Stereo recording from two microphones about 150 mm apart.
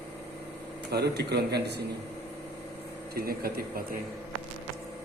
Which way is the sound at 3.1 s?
85° right.